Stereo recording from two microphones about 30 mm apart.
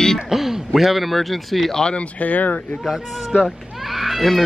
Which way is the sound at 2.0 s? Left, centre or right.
Left.